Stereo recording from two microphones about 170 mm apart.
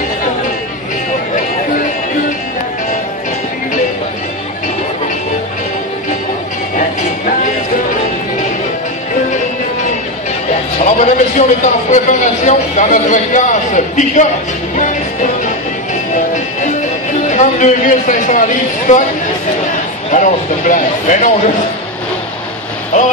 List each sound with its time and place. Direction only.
10.8 s a man's voice: 45° left (ahead or behind)
17.3 s a man's voice: 45° left (ahead or behind)
20.1 s a man's voice: 50° left (ahead or behind)